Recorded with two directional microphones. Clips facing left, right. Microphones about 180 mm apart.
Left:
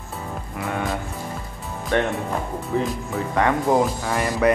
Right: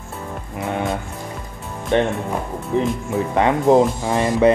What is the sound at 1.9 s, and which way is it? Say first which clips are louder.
Speech: right 3 dB; 20° right (ahead or behind).